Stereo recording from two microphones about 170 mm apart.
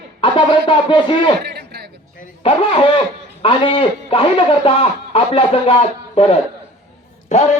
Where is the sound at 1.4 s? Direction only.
75° right (ahead or behind).